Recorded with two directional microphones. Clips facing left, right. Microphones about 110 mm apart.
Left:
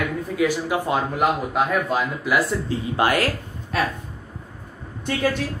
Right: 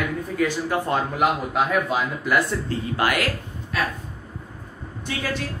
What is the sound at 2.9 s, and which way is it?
Speech, 30° left (ahead or behind).